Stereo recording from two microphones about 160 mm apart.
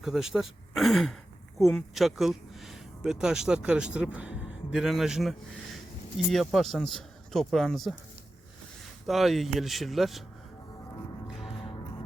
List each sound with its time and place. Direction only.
0.0 s a man's voice: centre (ahead or behind)
9.0 s a man's voice: centre (ahead or behind)
11.3 s music: centre (ahead or behind)
11.5 s music: 30° left (ahead or behind)